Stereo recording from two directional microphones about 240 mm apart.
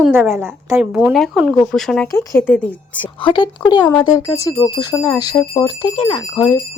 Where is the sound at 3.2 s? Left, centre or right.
Centre.